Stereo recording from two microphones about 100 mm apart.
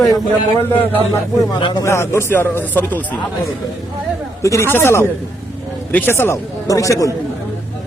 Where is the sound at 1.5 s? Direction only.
50° left (ahead or behind).